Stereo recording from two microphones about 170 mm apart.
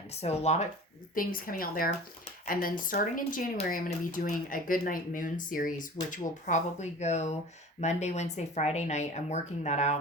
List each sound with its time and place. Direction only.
0.2 s speech: 40° left (ahead or behind)
1.1 s speech: 55° left (ahead or behind)